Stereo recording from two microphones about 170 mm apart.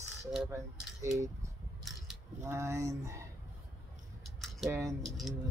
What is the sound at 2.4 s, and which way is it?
Speech, 15° right (ahead or behind).